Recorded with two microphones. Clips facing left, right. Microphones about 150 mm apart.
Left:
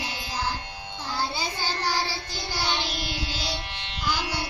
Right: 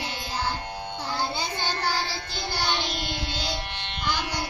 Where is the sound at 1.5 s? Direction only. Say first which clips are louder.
Right 1 dB; 10° left (ahead or behind).